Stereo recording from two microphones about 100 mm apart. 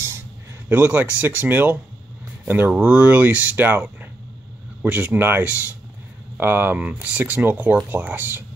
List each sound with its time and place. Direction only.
0.7 s speech: 15° right (ahead or behind)